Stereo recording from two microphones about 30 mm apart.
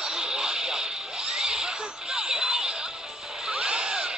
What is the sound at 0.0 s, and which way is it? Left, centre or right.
Radio, right.